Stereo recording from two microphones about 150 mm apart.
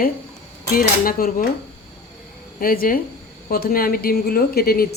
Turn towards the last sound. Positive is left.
turn(degrees=90)